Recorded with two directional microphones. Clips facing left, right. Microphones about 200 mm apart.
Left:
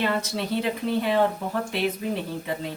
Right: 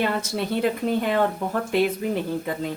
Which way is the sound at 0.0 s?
50° right (ahead or behind).